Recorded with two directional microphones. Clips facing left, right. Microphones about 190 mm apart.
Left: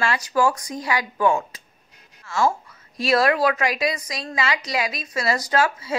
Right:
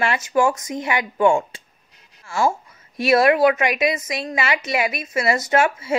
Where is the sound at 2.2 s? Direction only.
30° right (ahead or behind).